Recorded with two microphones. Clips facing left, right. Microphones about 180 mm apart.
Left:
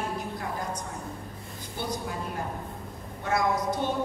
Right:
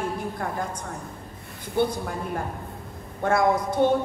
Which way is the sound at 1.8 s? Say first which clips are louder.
Right 12 dB; 60° right (ahead or behind).